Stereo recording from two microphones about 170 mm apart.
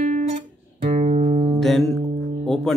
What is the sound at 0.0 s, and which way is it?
Music, 40° right (ahead or behind).